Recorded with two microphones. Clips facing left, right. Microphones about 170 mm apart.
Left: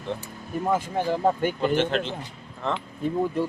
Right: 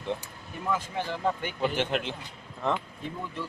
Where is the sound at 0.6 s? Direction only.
45° left (ahead or behind).